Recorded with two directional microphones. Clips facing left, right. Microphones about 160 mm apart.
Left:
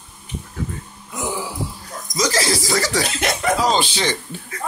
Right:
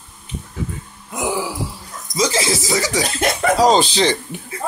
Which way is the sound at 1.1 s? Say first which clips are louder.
Right 4 dB; 70° right (ahead or behind).